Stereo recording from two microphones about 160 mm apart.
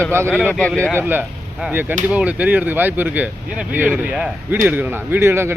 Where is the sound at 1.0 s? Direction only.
10° right (ahead or behind).